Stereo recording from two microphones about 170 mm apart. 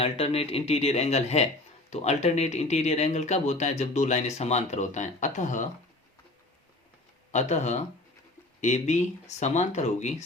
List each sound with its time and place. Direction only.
0.0 s speech: 35° left (ahead or behind)
7.3 s speech: 40° left (ahead or behind)